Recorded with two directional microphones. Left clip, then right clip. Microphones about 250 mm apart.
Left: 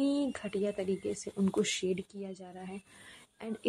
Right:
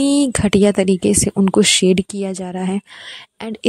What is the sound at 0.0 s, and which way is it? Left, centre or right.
Speech, right.